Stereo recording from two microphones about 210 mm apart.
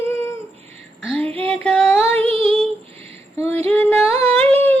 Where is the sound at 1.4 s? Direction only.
5° left (ahead or behind).